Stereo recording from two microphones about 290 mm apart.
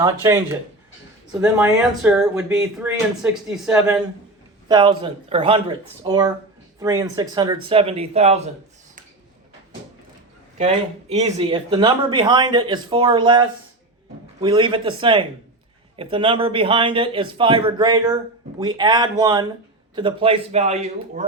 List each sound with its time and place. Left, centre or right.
0.0 s speech: centre
4.7 s speech: centre
11.1 s a man's voice: right